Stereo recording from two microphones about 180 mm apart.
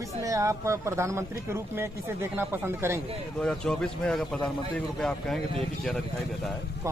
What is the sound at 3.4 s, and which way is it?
A man's voice, 5° left (ahead or behind).